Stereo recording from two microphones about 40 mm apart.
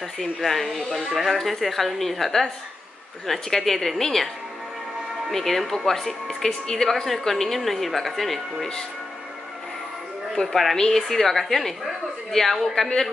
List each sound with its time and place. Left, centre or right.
0.2 s a woman's voice: centre
5.3 s speech: centre
10.3 s a woman's voice: centre